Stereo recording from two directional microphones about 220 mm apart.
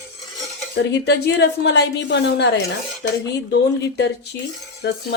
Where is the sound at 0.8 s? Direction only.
50° left (ahead or behind).